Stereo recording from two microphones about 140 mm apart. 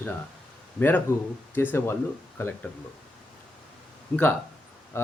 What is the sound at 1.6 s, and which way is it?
Speech, 15° left (ahead or behind).